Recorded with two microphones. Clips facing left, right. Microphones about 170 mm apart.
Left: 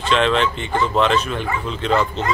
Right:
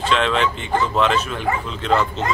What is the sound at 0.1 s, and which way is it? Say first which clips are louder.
Speech: left 3 dB; 5° right (ahead or behind).